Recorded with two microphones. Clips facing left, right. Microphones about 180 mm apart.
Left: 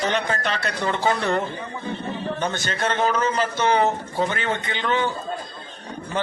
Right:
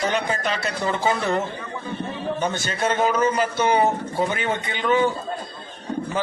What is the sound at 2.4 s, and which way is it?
A man's voice, 10° right (ahead or behind).